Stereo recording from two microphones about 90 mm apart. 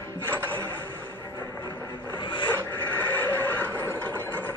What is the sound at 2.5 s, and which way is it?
Neigh, 20° left (ahead or behind).